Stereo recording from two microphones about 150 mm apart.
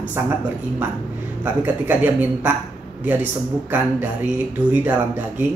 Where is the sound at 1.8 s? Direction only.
10° right (ahead or behind).